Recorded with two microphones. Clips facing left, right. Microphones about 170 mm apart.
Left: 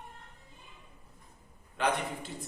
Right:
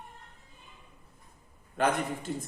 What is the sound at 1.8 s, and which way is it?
Speech, 45° right (ahead or behind).